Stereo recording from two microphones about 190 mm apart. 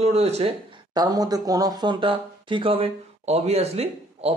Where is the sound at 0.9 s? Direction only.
20° right (ahead or behind).